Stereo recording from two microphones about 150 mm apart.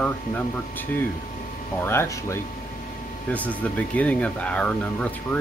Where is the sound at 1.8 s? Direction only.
15° left (ahead or behind).